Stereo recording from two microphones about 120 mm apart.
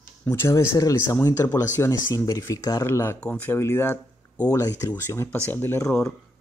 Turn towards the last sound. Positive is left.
turn(degrees=5)  # may be behind; listen again after turning